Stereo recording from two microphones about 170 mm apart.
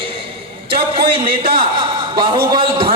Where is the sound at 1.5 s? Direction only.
25° right (ahead or behind).